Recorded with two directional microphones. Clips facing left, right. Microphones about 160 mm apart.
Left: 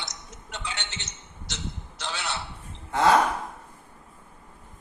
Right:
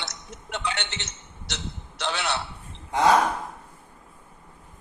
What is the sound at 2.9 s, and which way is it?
Speech, 15° right (ahead or behind).